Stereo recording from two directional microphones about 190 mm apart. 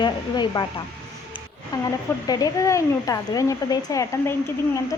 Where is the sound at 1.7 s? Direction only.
20° left (ahead or behind).